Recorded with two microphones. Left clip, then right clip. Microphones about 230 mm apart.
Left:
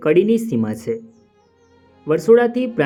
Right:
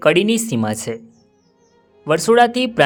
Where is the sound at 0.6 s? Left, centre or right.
Right.